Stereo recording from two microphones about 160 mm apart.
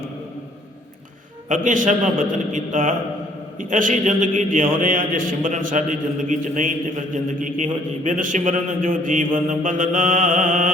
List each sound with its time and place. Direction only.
1.5 s a man's voice: 55° right (ahead or behind)
8.0 s mantra: 55° right (ahead or behind)